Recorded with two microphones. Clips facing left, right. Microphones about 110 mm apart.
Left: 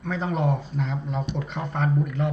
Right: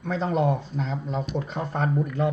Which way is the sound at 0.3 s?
35° right (ahead or behind).